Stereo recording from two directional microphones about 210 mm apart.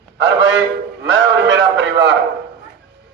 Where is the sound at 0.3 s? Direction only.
60° right (ahead or behind).